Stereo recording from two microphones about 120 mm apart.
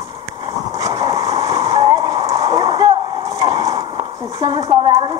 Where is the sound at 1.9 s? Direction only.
30° right (ahead or behind).